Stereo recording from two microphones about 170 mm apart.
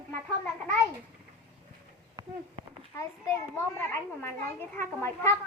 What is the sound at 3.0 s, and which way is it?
A child's voice, 15° left (ahead or behind).